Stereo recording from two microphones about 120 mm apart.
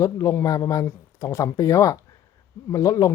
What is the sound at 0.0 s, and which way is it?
Speech, 30° left (ahead or behind).